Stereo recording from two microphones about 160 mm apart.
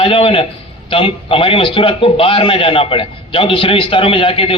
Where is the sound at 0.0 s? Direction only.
35° left (ahead or behind).